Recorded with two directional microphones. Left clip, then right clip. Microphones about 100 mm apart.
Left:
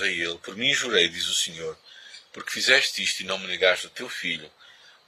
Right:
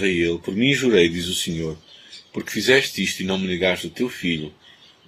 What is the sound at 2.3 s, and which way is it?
Speech, 35° left (ahead or behind).